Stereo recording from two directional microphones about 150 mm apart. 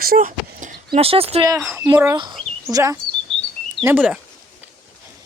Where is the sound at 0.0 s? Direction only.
75° right (ahead or behind).